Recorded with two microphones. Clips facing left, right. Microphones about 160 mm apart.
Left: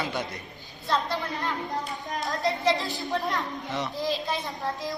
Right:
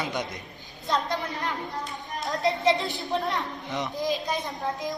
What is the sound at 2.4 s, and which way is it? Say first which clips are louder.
A child's voice: right 2 dB; 20° right (ahead or behind).